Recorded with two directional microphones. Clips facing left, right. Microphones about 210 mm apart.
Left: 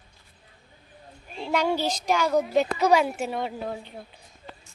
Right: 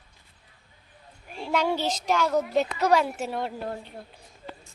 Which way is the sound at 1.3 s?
5° right (ahead or behind).